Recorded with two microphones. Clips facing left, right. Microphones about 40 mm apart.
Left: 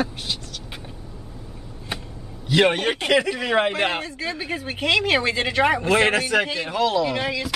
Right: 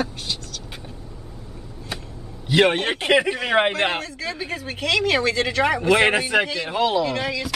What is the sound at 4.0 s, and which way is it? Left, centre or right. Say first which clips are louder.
Speech: even; centre.